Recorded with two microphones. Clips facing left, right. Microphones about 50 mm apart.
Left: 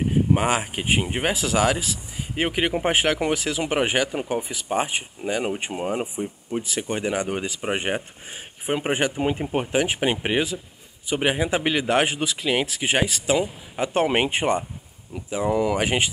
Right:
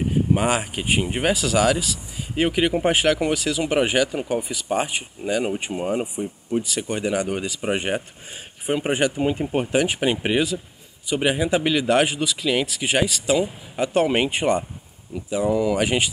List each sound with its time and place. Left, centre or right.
0.3 s speech: centre
15.5 s speech: left
15.8 s speech: left